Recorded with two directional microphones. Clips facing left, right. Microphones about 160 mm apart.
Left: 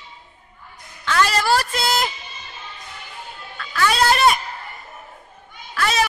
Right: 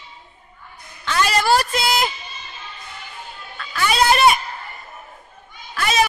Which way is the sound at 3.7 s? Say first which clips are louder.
Right 1 dB; 15° right (ahead or behind).